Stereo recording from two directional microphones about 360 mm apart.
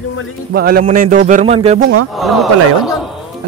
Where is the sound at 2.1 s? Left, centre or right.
Centre.